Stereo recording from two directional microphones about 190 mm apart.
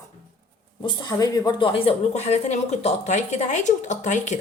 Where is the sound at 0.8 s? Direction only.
20° left (ahead or behind).